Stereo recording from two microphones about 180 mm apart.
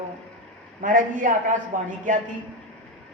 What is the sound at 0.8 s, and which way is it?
A woman's voice, 45° right (ahead or behind).